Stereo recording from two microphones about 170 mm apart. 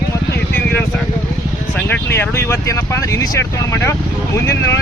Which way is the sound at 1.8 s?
10° left (ahead or behind).